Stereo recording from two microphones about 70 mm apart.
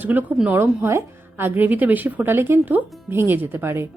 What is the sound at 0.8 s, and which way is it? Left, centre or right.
A woman's voice, right.